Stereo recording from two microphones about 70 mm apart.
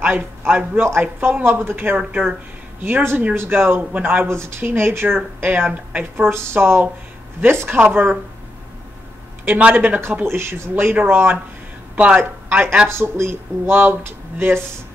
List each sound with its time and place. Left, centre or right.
0.0 s a man's voice: right
6.3 s speech: right
9.4 s speech: right
10.2 s speech: right
11.9 s speech: centre
12.8 s speech: right